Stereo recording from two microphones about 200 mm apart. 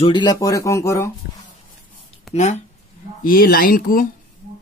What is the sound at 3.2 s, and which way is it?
Speech, 45° left (ahead or behind).